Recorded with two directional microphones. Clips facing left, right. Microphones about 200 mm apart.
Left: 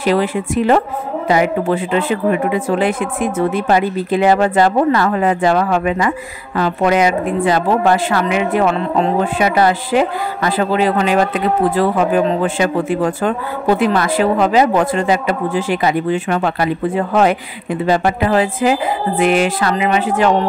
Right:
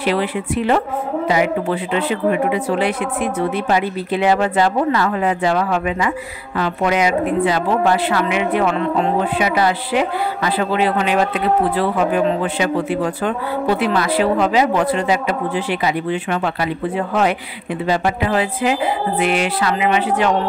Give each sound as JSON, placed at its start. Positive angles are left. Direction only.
{"t": 0.0, "sound": "a woman's voice", "side_deg": 45}